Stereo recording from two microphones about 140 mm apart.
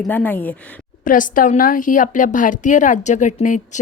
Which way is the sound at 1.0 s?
75° left (ahead or behind).